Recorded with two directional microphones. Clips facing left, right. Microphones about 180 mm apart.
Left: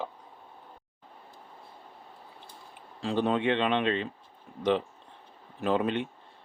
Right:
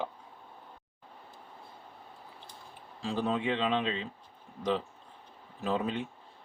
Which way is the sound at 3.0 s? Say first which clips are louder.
Left 4 dB; 65° left (ahead or behind).